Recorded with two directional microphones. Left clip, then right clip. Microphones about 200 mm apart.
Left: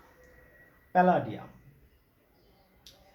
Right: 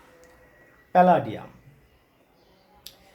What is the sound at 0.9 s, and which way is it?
Speech, 50° right (ahead or behind).